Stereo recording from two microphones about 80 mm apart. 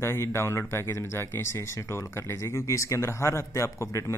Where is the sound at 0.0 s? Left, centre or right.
Left.